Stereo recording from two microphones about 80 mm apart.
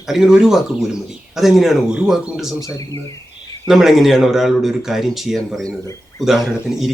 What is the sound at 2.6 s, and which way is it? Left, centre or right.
Speech, left.